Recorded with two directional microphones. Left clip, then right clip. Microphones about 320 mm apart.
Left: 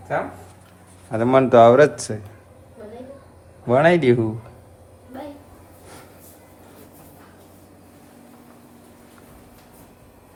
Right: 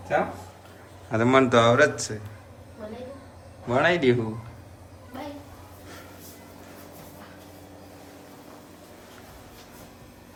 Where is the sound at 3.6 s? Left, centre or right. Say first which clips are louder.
Left 6 dB; centre.